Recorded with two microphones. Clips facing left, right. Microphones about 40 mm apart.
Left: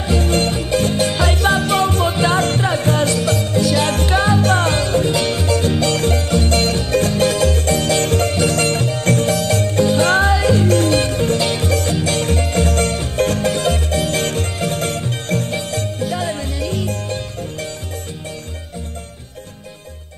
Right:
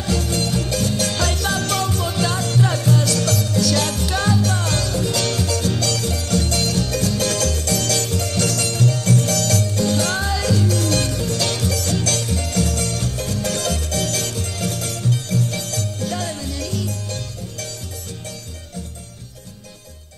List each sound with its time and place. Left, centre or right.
0.0 s music: left
0.3 s music: left
3.9 s music: left
8.0 s music: left
9.3 s music: left
9.6 s music: left
12.2 s music: left
13.4 s music: left
14.2 s music: left
15.5 s music: left